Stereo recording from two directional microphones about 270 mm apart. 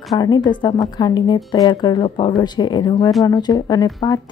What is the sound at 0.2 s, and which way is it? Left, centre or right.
A woman's voice, centre.